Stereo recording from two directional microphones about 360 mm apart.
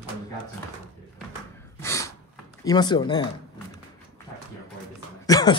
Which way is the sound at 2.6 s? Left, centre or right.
Centre.